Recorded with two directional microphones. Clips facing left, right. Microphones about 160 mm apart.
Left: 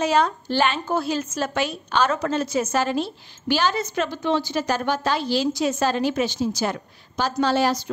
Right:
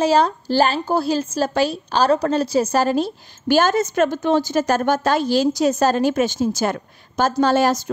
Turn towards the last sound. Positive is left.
turn(degrees=-45)  # may be behind; listen again after turning